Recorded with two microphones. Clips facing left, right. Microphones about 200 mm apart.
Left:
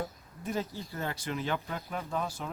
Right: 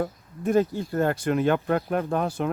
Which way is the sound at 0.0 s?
55° right (ahead or behind).